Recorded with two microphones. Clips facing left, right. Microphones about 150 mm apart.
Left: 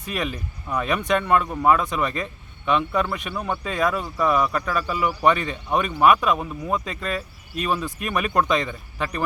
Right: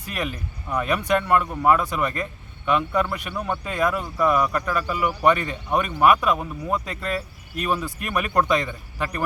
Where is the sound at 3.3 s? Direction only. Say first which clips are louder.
Right 1 dB; 5° left (ahead or behind).